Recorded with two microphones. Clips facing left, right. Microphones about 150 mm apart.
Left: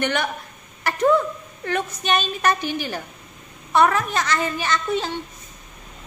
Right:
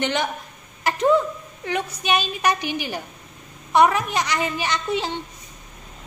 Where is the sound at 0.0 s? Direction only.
20° right (ahead or behind).